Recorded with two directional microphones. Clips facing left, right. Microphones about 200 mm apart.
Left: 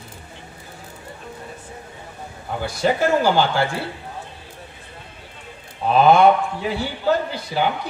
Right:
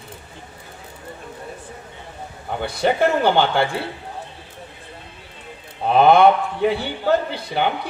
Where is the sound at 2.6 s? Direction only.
60° right (ahead or behind).